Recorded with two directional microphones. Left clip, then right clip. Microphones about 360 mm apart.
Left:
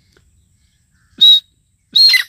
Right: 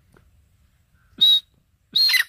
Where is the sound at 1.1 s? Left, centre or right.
Centre.